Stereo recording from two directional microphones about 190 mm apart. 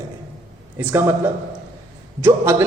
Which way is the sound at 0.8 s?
10° right (ahead or behind).